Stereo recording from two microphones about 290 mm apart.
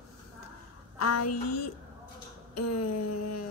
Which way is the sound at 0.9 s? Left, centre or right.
Left.